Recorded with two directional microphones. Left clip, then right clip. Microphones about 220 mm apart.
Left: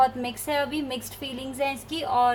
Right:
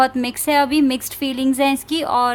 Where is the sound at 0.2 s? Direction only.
45° right (ahead or behind).